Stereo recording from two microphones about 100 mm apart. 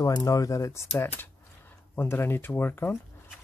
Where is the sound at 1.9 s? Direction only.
25° left (ahead or behind).